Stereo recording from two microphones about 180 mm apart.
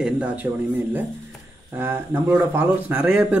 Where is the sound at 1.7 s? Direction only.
10° right (ahead or behind).